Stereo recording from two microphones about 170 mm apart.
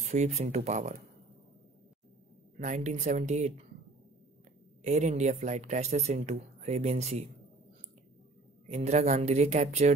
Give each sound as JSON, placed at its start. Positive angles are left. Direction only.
{"t": 0.1, "sound": "speech", "side_deg": -40}
{"t": 2.6, "sound": "speech", "side_deg": -45}
{"t": 4.8, "sound": "speech", "side_deg": -45}
{"t": 8.6, "sound": "speech", "side_deg": -40}